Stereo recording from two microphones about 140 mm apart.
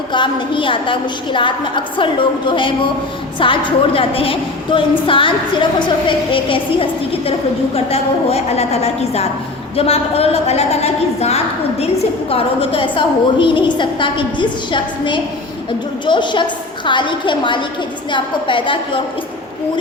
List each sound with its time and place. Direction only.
0.1 s a woman's voice: 35° left (ahead or behind)